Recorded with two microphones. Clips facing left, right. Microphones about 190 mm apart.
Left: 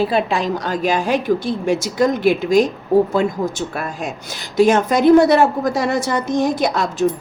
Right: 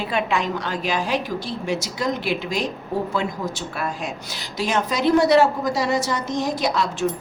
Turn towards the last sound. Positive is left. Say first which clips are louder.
# left 4 dB
turn(degrees=45)  # may be behind; listen again after turning